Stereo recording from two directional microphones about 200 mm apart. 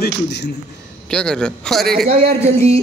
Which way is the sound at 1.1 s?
5° left (ahead or behind).